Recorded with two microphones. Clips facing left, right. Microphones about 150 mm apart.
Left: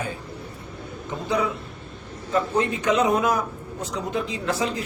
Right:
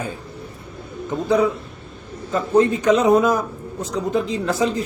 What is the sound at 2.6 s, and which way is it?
A man's voice, 35° right (ahead or behind).